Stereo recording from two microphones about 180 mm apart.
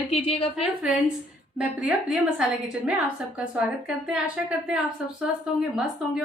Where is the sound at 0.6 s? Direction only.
5° right (ahead or behind).